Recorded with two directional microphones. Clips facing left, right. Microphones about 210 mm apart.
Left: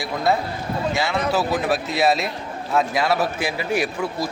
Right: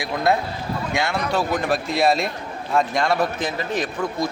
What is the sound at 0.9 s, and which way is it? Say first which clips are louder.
A man's voice: even; centre (ahead or behind).